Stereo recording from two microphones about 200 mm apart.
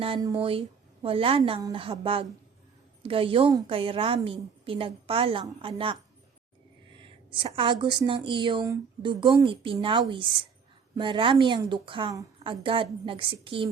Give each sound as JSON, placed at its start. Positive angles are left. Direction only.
{"t": 0.0, "sound": "a woman's voice", "side_deg": -25}
{"t": 7.3, "sound": "a woman's voice", "side_deg": -25}